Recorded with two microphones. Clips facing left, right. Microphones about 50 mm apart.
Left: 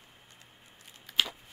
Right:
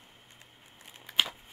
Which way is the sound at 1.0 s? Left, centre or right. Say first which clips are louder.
Right 1 dB; centre.